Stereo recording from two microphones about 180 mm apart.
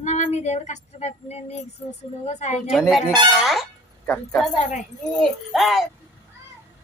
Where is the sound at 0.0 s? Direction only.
40° left (ahead or behind).